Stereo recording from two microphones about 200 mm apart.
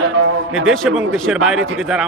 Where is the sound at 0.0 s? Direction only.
90° right.